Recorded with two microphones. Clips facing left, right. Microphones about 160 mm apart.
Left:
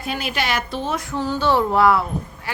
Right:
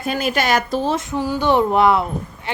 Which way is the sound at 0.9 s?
20° right (ahead or behind).